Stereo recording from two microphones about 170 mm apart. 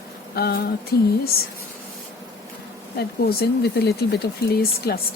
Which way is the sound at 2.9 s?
70° left (ahead or behind).